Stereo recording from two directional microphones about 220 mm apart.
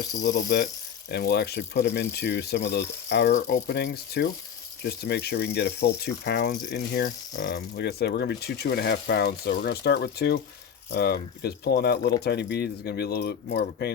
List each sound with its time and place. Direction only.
0.2 s speech: 55° left (ahead or behind)